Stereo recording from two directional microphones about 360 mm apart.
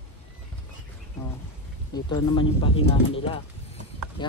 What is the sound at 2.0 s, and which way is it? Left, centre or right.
Speech, centre.